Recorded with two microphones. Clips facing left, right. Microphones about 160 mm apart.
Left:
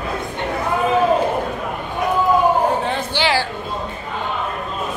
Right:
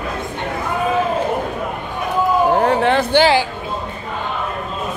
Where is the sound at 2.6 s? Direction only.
70° right (ahead or behind).